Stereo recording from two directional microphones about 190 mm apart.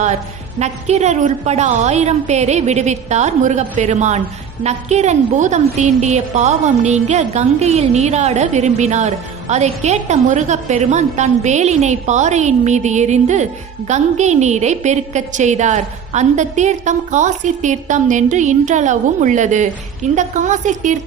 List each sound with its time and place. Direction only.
0.6 s music: 35° right (ahead or behind)